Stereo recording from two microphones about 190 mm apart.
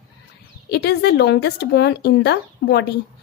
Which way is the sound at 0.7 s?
60° left (ahead or behind).